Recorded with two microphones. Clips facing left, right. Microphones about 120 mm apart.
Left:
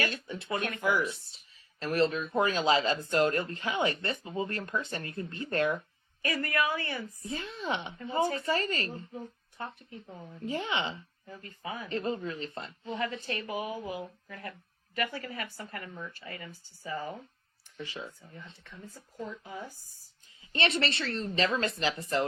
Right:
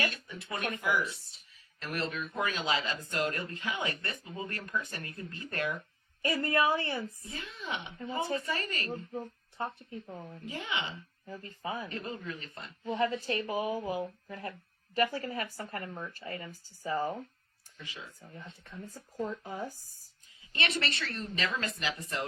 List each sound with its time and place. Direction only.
0.1 s speech: 30° left (ahead or behind)
6.2 s a woman's voice: 30° right (ahead or behind)
7.2 s speech: 30° left (ahead or behind)
8.9 s speech: 30° right (ahead or behind)
10.4 s speech: 30° left (ahead or behind)
11.3 s speech: 35° right (ahead or behind)
11.9 s speech: 30° left (ahead or behind)
12.9 s speech: 30° right (ahead or behind)
17.8 s speech: 35° left (ahead or behind)
18.9 s speech: 40° right (ahead or behind)
20.5 s speech: 30° left (ahead or behind)